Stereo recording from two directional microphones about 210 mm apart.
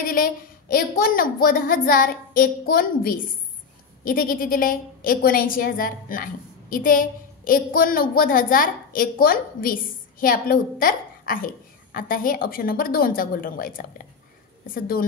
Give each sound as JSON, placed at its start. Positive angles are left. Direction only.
{"t": 0.0, "sound": "a woman's voice", "side_deg": 45}